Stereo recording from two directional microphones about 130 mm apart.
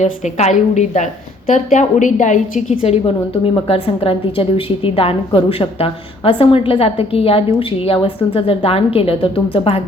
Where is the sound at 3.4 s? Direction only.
45° left (ahead or behind).